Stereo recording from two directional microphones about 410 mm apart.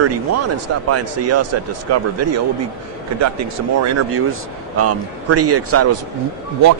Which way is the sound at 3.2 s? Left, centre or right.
Right.